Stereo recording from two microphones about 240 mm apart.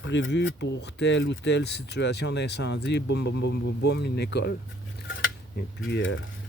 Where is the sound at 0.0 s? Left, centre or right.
Left.